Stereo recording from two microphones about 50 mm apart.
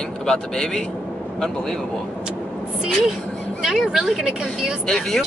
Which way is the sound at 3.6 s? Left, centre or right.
Centre.